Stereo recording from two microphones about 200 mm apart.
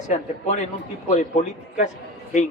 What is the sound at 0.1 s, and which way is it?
A man's voice, 35° left (ahead or behind).